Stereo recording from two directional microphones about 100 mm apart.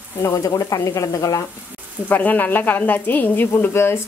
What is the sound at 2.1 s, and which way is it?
A woman's voice, 20° left (ahead or behind).